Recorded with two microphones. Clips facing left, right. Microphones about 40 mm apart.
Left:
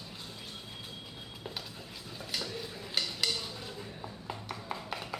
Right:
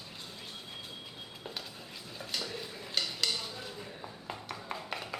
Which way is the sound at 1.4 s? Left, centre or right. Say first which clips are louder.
Left 1 dB; centre.